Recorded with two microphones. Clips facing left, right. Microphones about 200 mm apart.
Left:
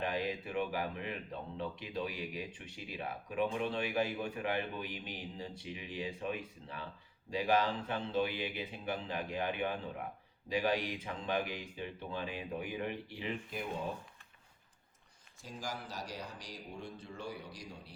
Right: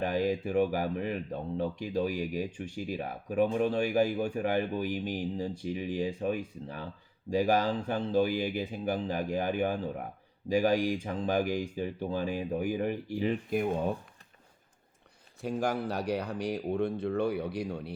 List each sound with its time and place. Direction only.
0.0 s speech: 45° right (ahead or behind)
15.4 s speech: 65° right (ahead or behind)